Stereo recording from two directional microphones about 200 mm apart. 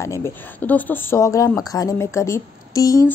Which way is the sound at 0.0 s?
15° left (ahead or behind).